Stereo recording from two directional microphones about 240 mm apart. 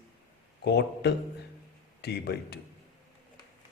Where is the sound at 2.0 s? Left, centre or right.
Left.